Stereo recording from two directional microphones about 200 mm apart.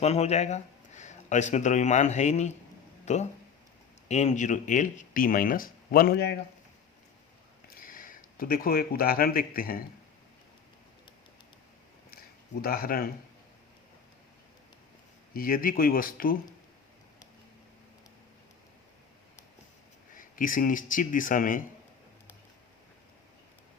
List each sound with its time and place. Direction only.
0.0 s speech: 30° left (ahead or behind); by 6.4 s 55° left (ahead or behind)
7.8 s speech: 45° left (ahead or behind)
12.6 s speech: 45° left (ahead or behind)
15.3 s speech: 45° left (ahead or behind)
20.1 s speech: 40° left (ahead or behind)